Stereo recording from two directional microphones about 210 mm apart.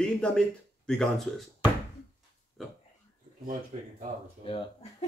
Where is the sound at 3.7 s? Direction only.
30° right (ahead or behind).